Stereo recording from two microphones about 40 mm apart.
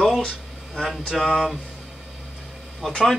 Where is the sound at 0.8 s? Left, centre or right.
Centre.